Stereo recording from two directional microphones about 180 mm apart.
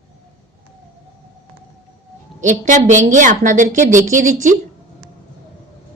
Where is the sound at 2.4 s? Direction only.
45° right (ahead or behind).